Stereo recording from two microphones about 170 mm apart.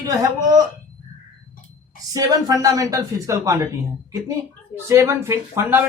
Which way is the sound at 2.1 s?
20° right (ahead or behind).